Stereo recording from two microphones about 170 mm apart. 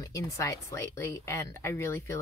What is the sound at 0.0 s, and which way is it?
Speech, 20° left (ahead or behind).